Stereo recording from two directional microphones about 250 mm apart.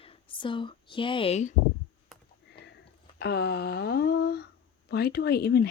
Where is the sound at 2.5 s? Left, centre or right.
Left.